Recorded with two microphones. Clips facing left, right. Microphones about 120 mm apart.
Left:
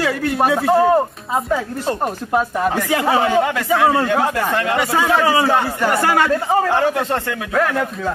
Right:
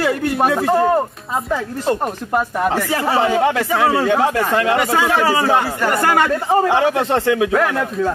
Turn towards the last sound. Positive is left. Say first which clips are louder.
# right 2 dB
turn(degrees=-20)  # may be behind; listen again after turning